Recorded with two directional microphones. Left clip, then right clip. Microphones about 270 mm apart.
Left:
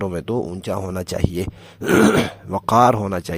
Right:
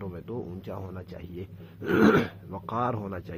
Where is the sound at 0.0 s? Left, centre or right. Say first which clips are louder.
Left 14 dB; left.